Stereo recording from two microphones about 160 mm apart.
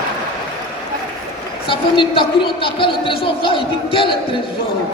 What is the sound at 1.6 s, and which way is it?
A man's voice, 35° left (ahead or behind).